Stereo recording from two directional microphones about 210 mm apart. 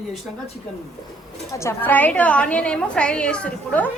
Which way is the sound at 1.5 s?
10° left (ahead or behind).